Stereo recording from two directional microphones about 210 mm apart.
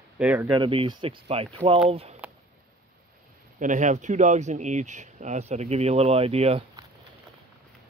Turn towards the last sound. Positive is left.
turn(degrees=-25)  # may be behind; listen again after turning